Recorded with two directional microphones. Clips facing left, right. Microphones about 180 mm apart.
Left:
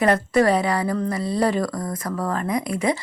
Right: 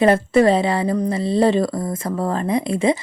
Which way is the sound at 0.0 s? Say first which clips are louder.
Right 4 dB; 25° right (ahead or behind).